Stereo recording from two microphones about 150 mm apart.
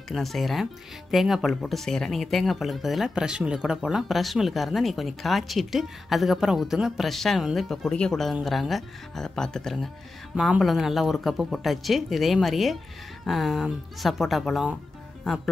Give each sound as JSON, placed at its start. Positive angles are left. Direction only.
{"t": 0.1, "sound": "speech", "side_deg": 0}